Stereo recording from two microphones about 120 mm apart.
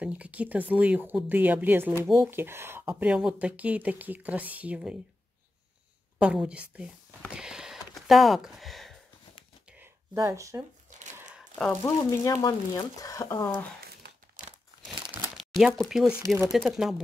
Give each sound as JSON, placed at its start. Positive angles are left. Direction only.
{"t": 0.0, "sound": "speech", "side_deg": -10}
{"t": 6.1, "sound": "speech", "side_deg": -10}
{"t": 7.2, "sound": "a sound", "side_deg": -5}
{"t": 10.1, "sound": "speech", "side_deg": -25}
{"t": 11.5, "sound": "speech", "side_deg": 5}
{"t": 11.8, "sound": "speech", "side_deg": 30}
{"t": 15.3, "sound": "speech", "side_deg": 0}